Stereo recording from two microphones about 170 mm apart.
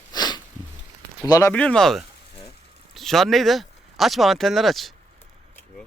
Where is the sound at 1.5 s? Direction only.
5° left (ahead or behind).